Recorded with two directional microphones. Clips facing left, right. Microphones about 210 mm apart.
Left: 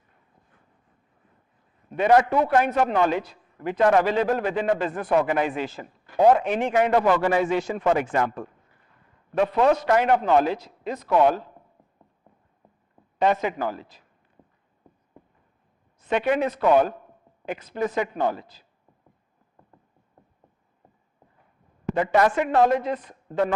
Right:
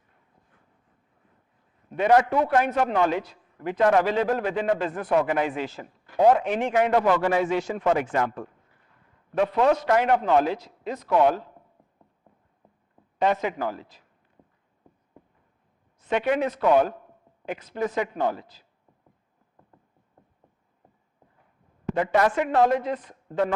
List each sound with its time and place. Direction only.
2.0 s a man's voice: 10° left (ahead or behind)
13.1 s a man's voice: 10° left (ahead or behind)
16.0 s a man's voice: 10° left (ahead or behind)
21.8 s a man's voice: 10° left (ahead or behind)